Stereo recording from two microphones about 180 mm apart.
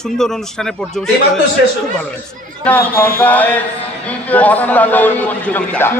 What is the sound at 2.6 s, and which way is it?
A man's voice, 10° left (ahead or behind).